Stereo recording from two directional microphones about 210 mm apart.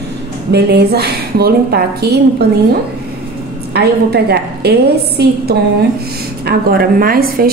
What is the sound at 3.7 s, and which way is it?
A woman's voice, 50° right (ahead or behind).